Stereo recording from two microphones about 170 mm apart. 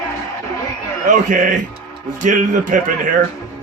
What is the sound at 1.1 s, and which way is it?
A man's voice, 50° right (ahead or behind).